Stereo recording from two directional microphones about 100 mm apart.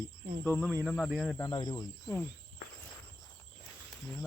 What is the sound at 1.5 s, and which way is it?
Speech, 40° left (ahead or behind).